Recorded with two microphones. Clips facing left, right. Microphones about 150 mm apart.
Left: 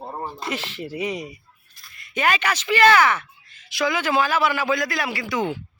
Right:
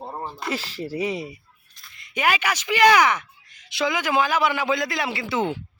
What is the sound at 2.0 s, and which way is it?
Speech, 15° right (ahead or behind).